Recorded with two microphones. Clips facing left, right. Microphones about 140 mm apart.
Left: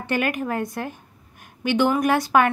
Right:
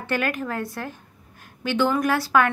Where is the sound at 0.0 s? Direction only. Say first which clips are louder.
Left 2 dB; 15° left (ahead or behind).